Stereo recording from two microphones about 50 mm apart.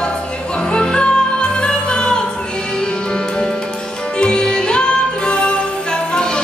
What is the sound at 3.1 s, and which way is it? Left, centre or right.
Music, centre.